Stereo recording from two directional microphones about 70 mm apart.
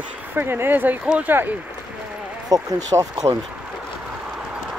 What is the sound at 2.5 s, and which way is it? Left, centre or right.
Speech, right.